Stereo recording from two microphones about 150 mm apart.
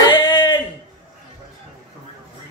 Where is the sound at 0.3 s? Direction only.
30° left (ahead or behind).